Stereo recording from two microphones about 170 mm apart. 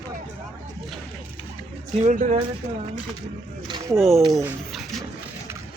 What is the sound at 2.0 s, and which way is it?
Speech, 45° right (ahead or behind).